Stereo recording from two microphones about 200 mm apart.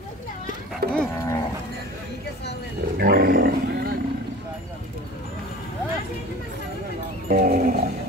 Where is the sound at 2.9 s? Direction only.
50° right (ahead or behind).